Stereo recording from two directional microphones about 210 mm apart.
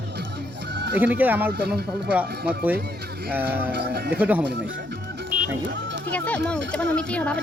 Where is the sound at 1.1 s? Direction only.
10° right (ahead or behind).